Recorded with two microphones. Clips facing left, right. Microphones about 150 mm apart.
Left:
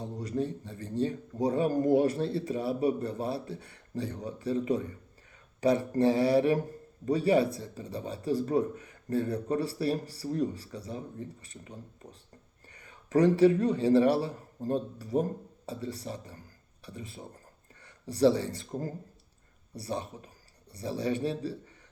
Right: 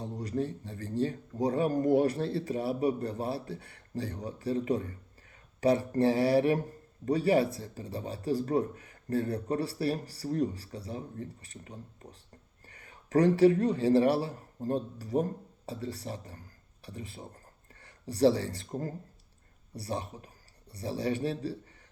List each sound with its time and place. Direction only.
0.3 s speech: 20° left (ahead or behind)